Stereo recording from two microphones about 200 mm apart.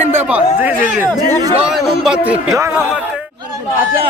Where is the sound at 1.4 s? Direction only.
20° right (ahead or behind).